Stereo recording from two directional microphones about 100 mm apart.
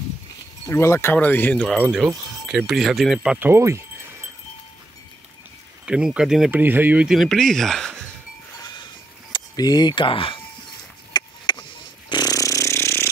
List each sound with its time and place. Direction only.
0.7 s speech: 25° left (ahead or behind)
2.4 s speech: 5° right (ahead or behind)
3.3 s speech: 25° right (ahead or behind)
5.9 s speech: 10° right (ahead or behind)
6.5 s speech: 20° right (ahead or behind)
7.1 s speech: centre (ahead or behind)
9.3 s speech: 40° left (ahead or behind); by 10.4 s 60° left (ahead or behind)
11.1 s a sound: 45° left (ahead or behind); by 13.1 s 25° left (ahead or behind)